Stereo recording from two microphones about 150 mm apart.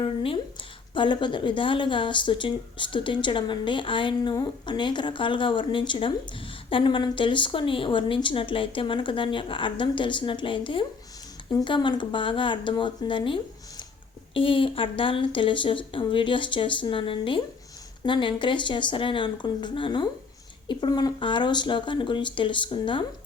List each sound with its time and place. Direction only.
0.0 s a woman's voice: 35° left (ahead or behind)